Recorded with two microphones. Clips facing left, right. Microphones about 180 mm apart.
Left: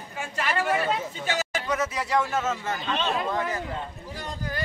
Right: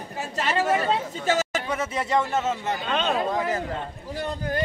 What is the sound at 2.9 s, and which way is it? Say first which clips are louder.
Speech: right 3 dB; 55° right (ahead or behind).